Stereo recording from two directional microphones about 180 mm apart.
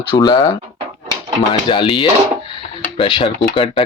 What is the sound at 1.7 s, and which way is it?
Speech, 30° left (ahead or behind).